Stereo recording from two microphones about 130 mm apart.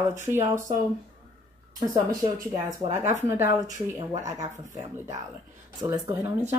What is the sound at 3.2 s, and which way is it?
Speech, 25° right (ahead or behind).